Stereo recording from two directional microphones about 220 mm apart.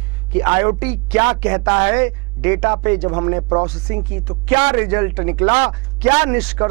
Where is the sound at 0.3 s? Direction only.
15° right (ahead or behind).